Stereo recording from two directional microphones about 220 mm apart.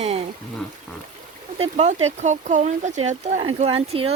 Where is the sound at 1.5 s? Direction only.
30° right (ahead or behind).